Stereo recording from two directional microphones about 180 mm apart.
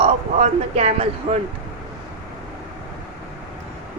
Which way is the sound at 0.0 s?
40° right (ahead or behind).